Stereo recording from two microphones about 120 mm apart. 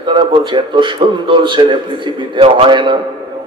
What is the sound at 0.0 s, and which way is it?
A man's voice, 40° right (ahead or behind).